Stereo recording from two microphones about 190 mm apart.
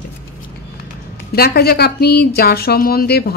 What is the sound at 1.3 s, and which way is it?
Speech, 55° left (ahead or behind).